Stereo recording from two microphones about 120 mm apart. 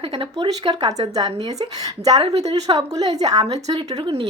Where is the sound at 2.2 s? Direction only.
55° right (ahead or behind).